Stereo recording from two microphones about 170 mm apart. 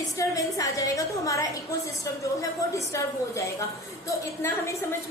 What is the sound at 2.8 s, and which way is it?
A woman's voice, 20° left (ahead or behind).